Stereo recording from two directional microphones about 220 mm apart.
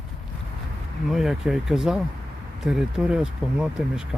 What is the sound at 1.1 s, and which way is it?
Speech, centre (ahead or behind).